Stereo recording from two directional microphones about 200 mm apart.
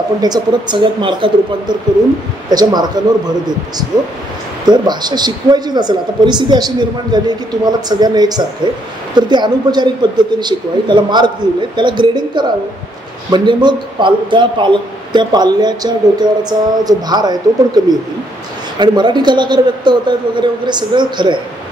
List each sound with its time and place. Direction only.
0.2 s a man's voice: 20° right (ahead or behind)